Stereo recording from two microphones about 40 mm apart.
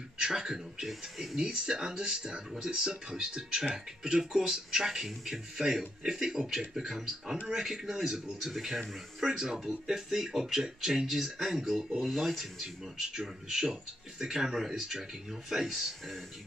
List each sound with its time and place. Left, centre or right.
0.2 s speech: centre
0.8 s speech: centre
12.0 s speech: centre
13.1 s speech: centre